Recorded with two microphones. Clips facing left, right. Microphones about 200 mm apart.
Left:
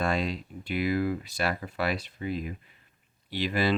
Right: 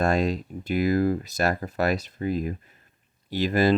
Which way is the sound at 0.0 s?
45° right (ahead or behind).